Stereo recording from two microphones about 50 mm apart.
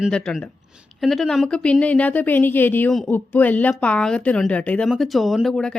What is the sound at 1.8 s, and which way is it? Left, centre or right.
Speech, left.